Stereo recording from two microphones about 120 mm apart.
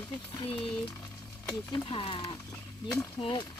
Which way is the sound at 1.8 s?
45° left (ahead or behind).